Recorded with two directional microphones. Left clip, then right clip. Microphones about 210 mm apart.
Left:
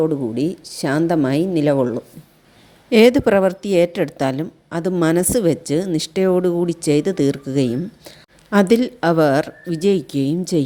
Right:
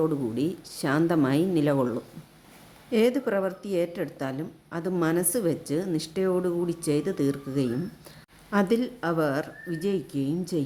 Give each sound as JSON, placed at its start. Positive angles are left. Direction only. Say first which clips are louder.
{"t": 0.0, "sound": "speech", "louder": "left 7 dB", "side_deg": 25}
{"t": 2.9, "sound": "a woman's voice", "louder": "left 11 dB", "side_deg": 40}